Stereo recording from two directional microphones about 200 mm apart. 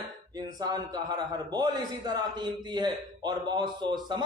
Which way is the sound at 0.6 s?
20° right (ahead or behind).